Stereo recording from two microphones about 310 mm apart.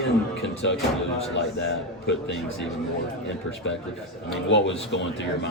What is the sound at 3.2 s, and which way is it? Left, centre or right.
A man's voice, left.